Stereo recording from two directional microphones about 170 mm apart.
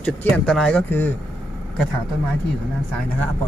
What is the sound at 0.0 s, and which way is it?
Speech, 5° left (ahead or behind).